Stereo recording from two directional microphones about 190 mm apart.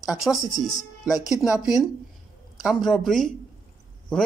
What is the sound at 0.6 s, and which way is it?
Speech, 20° left (ahead or behind).